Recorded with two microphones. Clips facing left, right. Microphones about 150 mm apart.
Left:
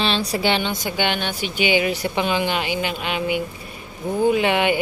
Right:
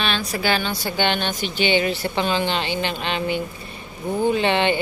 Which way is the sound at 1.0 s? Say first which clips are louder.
Right 2 dB; 10° left (ahead or behind).